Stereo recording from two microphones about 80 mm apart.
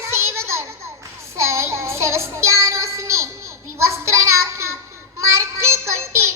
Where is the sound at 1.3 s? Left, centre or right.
Right.